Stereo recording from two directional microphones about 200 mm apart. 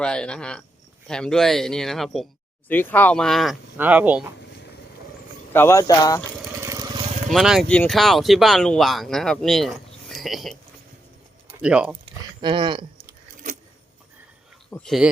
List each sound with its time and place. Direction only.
0.0 s speech: 5° left (ahead or behind)
5.5 s speech: 15° left (ahead or behind)
6.4 s vehicle: 15° right (ahead or behind)
7.3 s speech: centre (ahead or behind)
11.6 s speech: 5° right (ahead or behind)
12.0 s speech: 25° right (ahead or behind)
13.1 s keys jangling: 40° right (ahead or behind)
14.7 s speech: 5° left (ahead or behind)